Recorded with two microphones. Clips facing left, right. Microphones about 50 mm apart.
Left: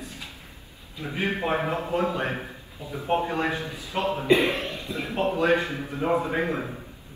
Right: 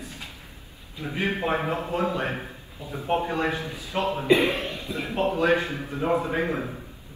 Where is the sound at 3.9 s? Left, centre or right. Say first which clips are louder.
Right 1 dB; centre.